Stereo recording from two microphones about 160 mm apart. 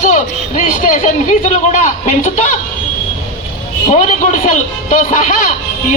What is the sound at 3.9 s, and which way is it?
A man's voice, 50° left (ahead or behind).